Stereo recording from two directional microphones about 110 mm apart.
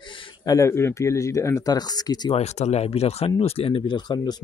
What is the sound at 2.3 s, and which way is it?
Speech, 85° left.